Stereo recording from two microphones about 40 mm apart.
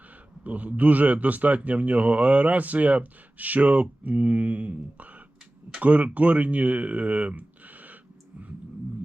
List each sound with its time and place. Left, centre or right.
0.4 s a man's voice: right